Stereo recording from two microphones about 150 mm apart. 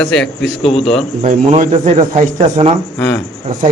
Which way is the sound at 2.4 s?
35° right (ahead or behind).